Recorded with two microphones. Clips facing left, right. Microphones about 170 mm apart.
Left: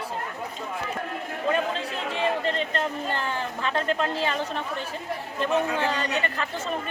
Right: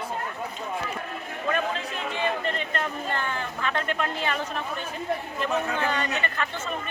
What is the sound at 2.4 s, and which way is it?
Speech, 30° left (ahead or behind).